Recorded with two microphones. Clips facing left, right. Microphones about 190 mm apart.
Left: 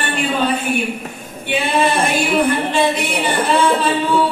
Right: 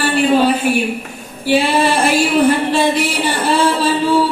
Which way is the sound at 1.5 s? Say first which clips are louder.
Right 3 dB; 35° right (ahead or behind).